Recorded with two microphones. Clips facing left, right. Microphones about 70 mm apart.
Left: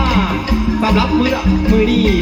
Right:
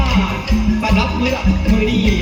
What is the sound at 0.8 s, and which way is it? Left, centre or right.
Music, left.